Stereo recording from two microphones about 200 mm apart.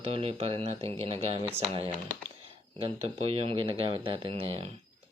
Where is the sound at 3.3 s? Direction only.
30° right (ahead or behind).